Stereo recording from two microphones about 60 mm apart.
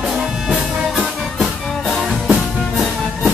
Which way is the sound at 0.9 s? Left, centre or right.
Centre.